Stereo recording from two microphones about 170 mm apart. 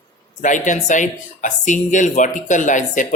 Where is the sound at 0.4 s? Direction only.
45° left (ahead or behind).